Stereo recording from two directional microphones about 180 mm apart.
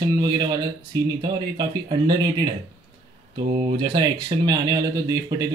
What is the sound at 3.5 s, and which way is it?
Speech, 25° right (ahead or behind).